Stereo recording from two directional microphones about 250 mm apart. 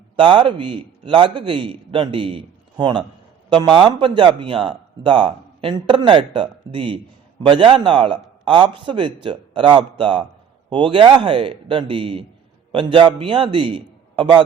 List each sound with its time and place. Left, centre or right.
0.2 s speech: centre